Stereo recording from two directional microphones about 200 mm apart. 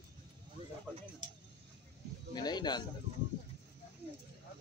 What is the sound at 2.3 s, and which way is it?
Speech, 20° left (ahead or behind).